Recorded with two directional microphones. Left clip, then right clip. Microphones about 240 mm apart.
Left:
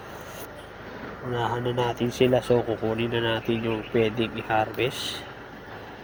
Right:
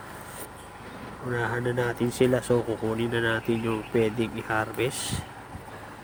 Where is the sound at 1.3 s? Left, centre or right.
Centre.